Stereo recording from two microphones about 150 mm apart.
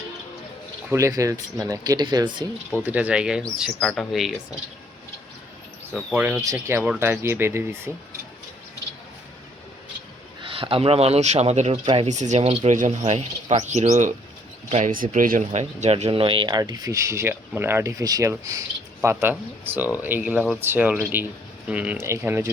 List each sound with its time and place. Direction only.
0.9 s speech: 20° right (ahead or behind)
2.8 s speech: 10° right (ahead or behind)
6.4 s speech: 20° right (ahead or behind)
10.4 s speech: 35° right (ahead or behind)
12.0 s speech: 50° right (ahead or behind)
14.9 s speech: 65° right (ahead or behind); by 22.4 s 15° right (ahead or behind)